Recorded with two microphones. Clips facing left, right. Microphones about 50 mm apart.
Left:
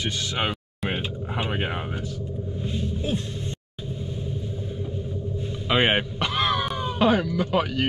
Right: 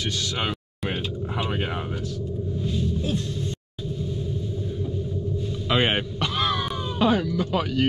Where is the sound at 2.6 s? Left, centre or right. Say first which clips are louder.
Right 2 dB; left.